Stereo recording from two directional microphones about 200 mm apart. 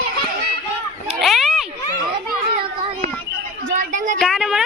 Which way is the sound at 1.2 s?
Centre (ahead or behind).